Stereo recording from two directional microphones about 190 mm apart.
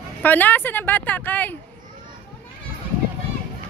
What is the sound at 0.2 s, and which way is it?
A woman's voice, 10° left (ahead or behind).